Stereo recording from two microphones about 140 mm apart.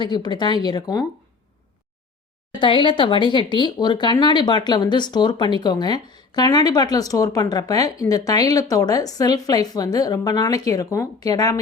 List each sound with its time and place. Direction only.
0.0 s speech: 30° left (ahead or behind)
2.5 s a woman's voice: 35° left (ahead or behind)